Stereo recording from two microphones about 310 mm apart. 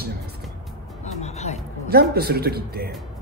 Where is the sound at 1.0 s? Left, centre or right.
Left.